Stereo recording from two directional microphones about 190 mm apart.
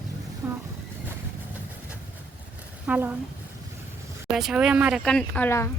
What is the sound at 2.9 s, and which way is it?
Speech, 10° right (ahead or behind).